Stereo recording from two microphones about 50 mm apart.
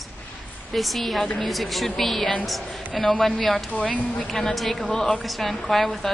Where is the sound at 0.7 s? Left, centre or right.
Centre.